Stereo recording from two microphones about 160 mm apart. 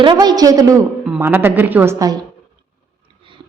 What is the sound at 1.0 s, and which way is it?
A woman's voice, 10° right (ahead or behind).